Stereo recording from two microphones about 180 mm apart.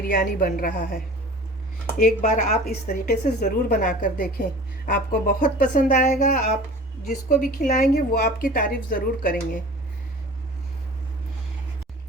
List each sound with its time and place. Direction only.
0.1 s a woman's voice: 55° left (ahead or behind)
2.0 s a woman's voice: 50° left (ahead or behind)
7.1 s speech: 45° left (ahead or behind)